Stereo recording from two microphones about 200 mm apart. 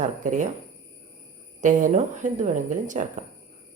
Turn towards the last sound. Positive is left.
turn(degrees=-40)  # may be behind; listen again after turning